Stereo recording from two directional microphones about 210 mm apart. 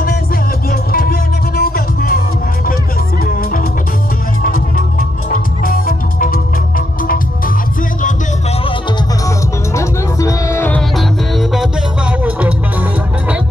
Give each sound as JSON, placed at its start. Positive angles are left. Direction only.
{"t": 0.7, "sound": "music", "side_deg": 45}
{"t": 4.4, "sound": "music", "side_deg": 40}
{"t": 9.8, "sound": "music", "side_deg": 15}
{"t": 11.0, "sound": "music", "side_deg": 0}